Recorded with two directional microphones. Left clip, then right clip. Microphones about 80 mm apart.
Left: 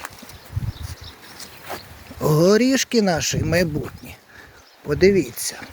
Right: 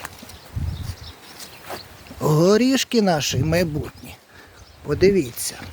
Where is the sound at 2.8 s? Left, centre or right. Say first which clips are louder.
Even; centre.